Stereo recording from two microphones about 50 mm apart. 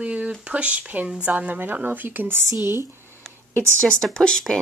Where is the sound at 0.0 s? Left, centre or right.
Right.